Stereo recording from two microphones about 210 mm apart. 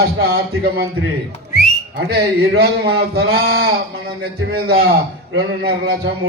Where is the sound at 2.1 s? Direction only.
50° right (ahead or behind).